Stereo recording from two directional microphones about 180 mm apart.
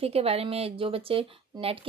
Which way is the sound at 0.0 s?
35° right (ahead or behind).